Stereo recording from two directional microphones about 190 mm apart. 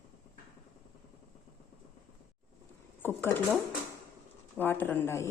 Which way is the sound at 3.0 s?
10° left (ahead or behind).